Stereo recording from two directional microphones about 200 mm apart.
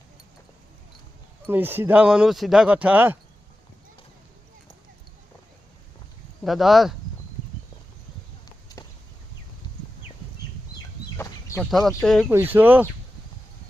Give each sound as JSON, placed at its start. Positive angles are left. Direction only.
{"t": 1.5, "sound": "speech", "side_deg": -10}
{"t": 6.4, "sound": "speech", "side_deg": 0}
{"t": 11.2, "sound": "chicken", "side_deg": 15}
{"t": 11.6, "sound": "speech", "side_deg": 0}
{"t": 12.3, "sound": "speech", "side_deg": -10}